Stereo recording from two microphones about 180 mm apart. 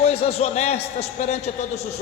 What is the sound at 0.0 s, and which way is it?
A man's voice, 35° left (ahead or behind).